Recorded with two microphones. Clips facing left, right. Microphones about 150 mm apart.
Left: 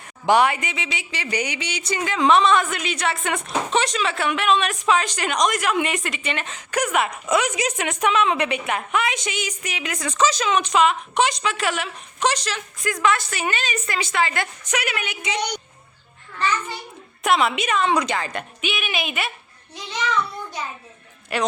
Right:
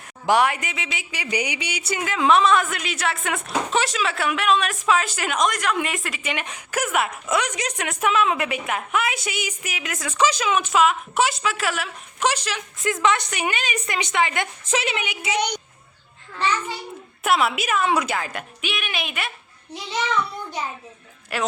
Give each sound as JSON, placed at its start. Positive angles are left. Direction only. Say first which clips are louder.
{"t": 0.3, "sound": "speech", "louder": "left 2 dB", "side_deg": 0}
{"t": 6.3, "sound": "speech", "louder": "left 2 dB", "side_deg": -10}
{"t": 12.8, "sound": "a woman's voice", "louder": "even", "side_deg": -20}
{"t": 15.0, "sound": "a woman's voice", "louder": "right 1 dB", "side_deg": -10}
{"t": 17.2, "sound": "speech", "louder": "left 1 dB", "side_deg": -5}
{"t": 21.3, "sound": "speech", "louder": "left 2 dB", "side_deg": 0}